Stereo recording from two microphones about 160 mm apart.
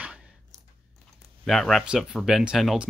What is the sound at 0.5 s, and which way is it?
Typing, 25° right (ahead or behind).